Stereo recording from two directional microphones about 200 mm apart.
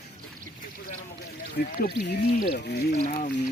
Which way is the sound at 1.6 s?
50° left (ahead or behind).